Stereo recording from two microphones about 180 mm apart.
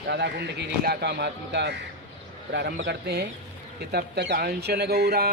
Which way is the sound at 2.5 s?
70° right (ahead or behind).